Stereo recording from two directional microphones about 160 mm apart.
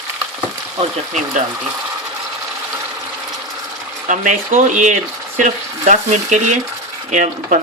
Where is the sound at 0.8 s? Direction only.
45° right (ahead or behind).